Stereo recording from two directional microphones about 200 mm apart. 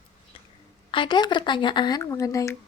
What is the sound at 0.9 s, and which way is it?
A woman's voice, 25° left (ahead or behind).